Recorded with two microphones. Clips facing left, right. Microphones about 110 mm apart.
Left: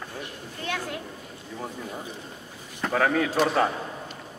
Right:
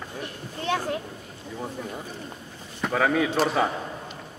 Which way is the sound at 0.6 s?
30° right (ahead or behind).